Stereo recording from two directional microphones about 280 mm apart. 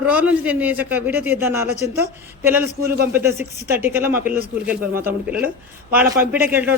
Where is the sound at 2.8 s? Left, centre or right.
Right.